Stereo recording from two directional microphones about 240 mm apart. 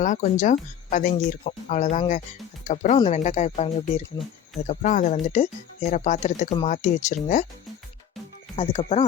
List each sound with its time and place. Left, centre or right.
0.0 s speech: left
8.5 s speech: left